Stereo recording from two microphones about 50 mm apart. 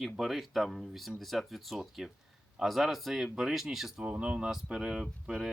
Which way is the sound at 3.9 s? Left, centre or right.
Right.